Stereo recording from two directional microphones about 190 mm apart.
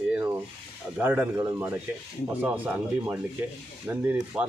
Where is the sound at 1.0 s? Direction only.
10° right (ahead or behind).